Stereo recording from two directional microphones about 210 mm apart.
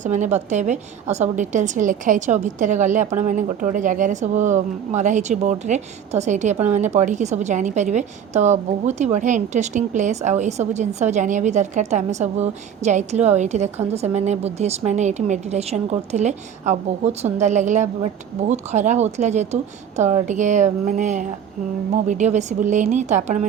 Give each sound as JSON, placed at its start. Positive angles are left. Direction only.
{"t": 0.0, "sound": "a woman's voice", "side_deg": -35}